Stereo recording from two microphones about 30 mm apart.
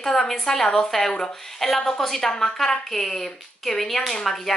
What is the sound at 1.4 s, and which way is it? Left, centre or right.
Speech, centre.